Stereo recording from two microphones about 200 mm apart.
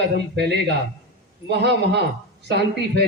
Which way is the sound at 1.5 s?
60° right (ahead or behind).